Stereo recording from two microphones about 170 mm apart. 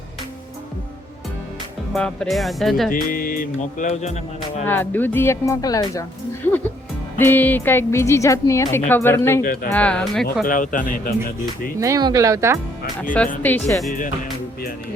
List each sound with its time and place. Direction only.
1.9 s speech: 5° left (ahead or behind)
2.9 s music: 55° left (ahead or behind)
4.6 s speech: 10° left (ahead or behind)
10.4 s music: 50° left (ahead or behind)
11.8 s speech: 20° right (ahead or behind)
13.4 s speech: 15° left (ahead or behind)